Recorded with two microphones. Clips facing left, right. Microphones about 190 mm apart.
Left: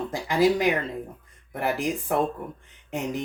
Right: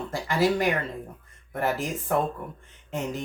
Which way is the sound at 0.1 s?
15° left (ahead or behind).